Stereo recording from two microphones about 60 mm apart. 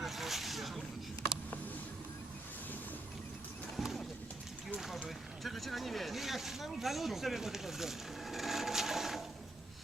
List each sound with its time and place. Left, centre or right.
0.0 s snake: centre
3.8 s horse: centre
5.0 s a sound: centre